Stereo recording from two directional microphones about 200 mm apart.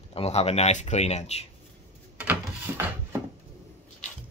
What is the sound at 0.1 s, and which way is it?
Speech, 30° left (ahead or behind).